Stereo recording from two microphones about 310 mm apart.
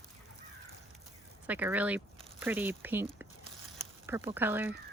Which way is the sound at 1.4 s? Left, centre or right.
Centre.